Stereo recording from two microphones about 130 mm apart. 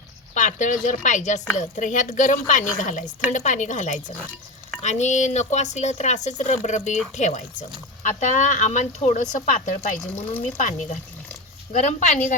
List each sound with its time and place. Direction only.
0.3 s speech: 75° left (ahead or behind)